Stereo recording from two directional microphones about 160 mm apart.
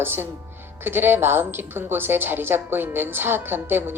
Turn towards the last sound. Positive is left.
turn(degrees=-15)  # may be behind; listen again after turning